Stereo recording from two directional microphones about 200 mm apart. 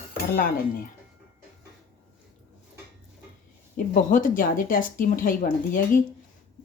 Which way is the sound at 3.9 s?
40° left (ahead or behind).